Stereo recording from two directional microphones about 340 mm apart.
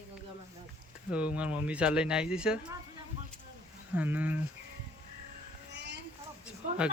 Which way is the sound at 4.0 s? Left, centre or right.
Centre.